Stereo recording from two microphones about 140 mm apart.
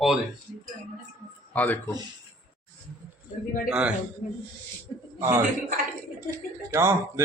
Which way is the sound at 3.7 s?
10° right (ahead or behind).